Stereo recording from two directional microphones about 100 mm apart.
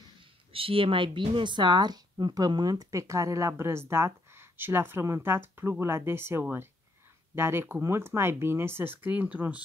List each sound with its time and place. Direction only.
0.2 s speech: 65° right (ahead or behind); by 9.6 s 15° right (ahead or behind)